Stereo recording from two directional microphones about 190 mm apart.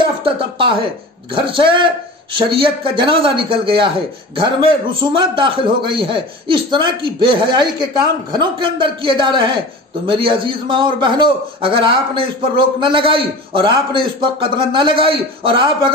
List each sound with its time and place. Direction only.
0.2 s a man's voice: 25° right (ahead or behind)
5.1 s a man's voice: 25° right (ahead or behind)